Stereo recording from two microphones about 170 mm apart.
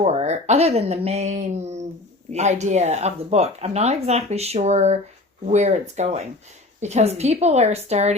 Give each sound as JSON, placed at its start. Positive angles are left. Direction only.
{"t": 0.0, "sound": "speech", "side_deg": -40}